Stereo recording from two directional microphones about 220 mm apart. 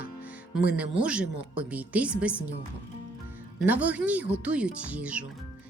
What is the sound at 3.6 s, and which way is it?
A woman's voice, 5° right (ahead or behind).